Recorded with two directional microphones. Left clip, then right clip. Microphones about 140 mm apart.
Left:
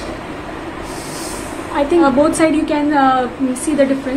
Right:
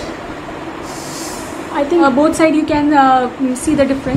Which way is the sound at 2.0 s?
10° right (ahead or behind).